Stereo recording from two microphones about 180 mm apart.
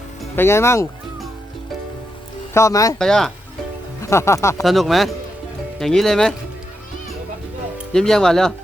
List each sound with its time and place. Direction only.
0.3 s speech: 15° left (ahead or behind)
2.5 s speech: 15° left (ahead or behind)
3.0 s speech: 5° left (ahead or behind)
4.0 s speech: 15° left (ahead or behind)
4.6 s speech: centre (ahead or behind)
7.9 s speech: 5° left (ahead or behind)